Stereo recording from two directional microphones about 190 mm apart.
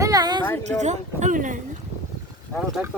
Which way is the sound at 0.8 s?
40° right (ahead or behind).